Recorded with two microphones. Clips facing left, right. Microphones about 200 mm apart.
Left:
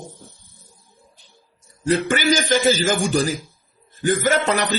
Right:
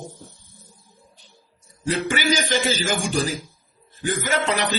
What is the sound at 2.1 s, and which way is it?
A man's voice, 45° left (ahead or behind).